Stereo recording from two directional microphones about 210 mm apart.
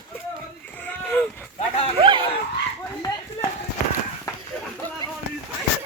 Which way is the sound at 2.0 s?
25° right (ahead or behind).